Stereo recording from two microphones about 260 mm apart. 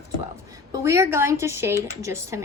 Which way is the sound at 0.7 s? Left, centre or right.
Centre.